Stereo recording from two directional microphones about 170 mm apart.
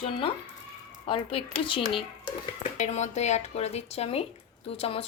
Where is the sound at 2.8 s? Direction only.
40° left (ahead or behind).